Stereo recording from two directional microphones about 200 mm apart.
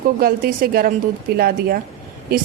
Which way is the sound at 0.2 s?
45° right (ahead or behind).